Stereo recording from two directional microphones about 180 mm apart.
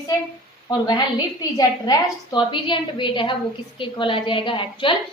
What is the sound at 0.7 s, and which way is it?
A woman's voice, 25° left (ahead or behind).